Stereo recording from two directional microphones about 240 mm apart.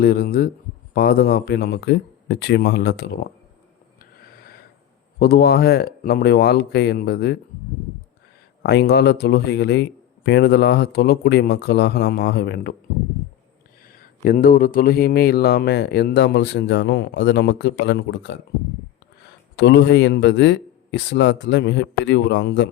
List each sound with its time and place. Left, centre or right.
0.0 s speech: left
5.2 s speech: left
8.6 s speech: left
14.3 s speech: left
19.5 s speech: left